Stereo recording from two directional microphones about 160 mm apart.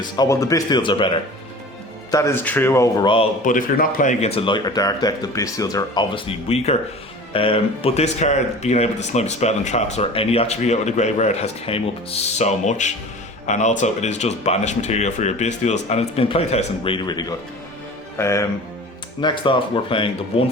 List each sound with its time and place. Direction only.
0.2 s speech: 20° left (ahead or behind)
2.0 s speech: 20° left (ahead or behind)
3.4 s speech: 60° left (ahead or behind); by 18.4 s 20° left (ahead or behind)
19.2 s speech: 30° left (ahead or behind)